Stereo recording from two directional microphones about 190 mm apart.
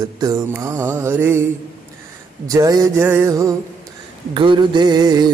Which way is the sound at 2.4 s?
20° right (ahead or behind).